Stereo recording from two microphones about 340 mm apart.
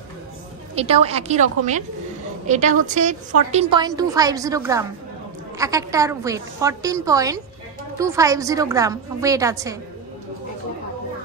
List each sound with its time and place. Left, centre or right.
0.7 s a woman's voice: centre